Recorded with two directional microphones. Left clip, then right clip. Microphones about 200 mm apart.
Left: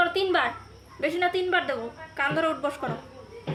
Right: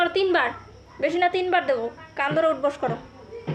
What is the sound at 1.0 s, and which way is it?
A woman's voice, 25° left (ahead or behind).